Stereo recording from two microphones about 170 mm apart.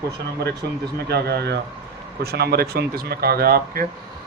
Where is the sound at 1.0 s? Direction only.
75° right (ahead or behind).